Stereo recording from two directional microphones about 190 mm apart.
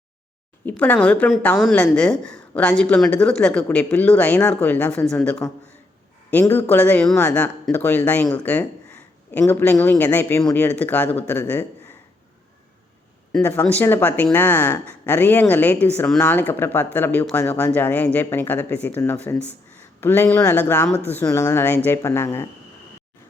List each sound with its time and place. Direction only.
0.6 s a woman's voice: 5° left (ahead or behind)
13.3 s a woman's voice: 5° left (ahead or behind)